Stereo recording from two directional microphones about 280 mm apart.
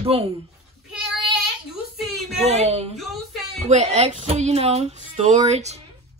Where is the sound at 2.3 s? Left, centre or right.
Right.